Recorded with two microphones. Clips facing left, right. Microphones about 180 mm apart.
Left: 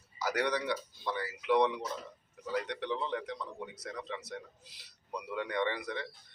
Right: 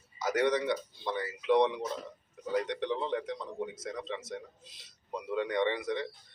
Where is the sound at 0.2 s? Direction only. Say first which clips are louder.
Right 4 dB; 20° right (ahead or behind).